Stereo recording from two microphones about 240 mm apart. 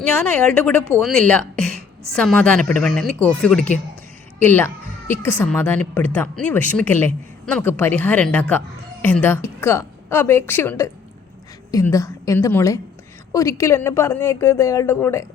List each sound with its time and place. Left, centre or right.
0.2 s a woman's voice: centre